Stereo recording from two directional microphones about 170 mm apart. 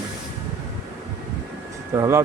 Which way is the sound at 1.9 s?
15° right (ahead or behind).